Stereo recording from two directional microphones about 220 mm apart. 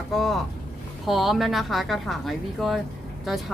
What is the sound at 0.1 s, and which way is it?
Speech, centre (ahead or behind).